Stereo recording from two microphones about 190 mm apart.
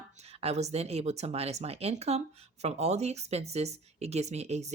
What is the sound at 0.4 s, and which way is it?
Speech, 35° right (ahead or behind).